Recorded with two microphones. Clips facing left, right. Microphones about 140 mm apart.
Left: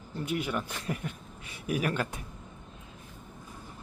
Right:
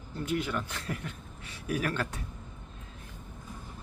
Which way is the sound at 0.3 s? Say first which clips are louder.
Even; 10° left (ahead or behind).